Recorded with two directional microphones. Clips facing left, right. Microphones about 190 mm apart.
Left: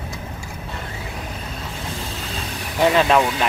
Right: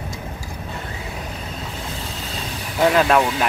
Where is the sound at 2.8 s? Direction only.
Centre (ahead or behind).